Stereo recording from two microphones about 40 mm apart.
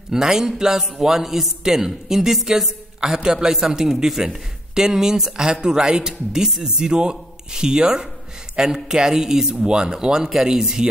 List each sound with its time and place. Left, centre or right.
0.1 s a man's voice: centre